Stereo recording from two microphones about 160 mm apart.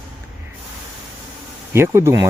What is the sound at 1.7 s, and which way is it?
Speech, 15° right (ahead or behind).